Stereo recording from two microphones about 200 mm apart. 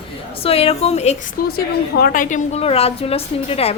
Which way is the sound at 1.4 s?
50° left (ahead or behind).